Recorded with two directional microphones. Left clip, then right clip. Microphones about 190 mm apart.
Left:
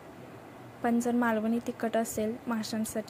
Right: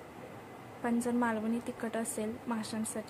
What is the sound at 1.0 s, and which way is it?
Speech, 20° left (ahead or behind).